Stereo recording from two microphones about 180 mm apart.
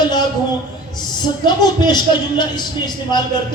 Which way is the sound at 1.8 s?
25° left (ahead or behind).